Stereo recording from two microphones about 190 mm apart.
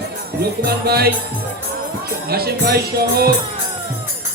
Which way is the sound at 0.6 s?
55° right (ahead or behind).